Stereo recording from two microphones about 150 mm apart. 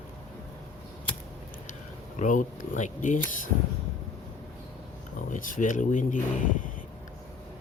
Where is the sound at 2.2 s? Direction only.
60° left (ahead or behind).